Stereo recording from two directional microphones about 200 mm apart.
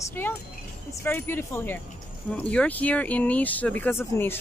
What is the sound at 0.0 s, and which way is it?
Speech, 10° left (ahead or behind).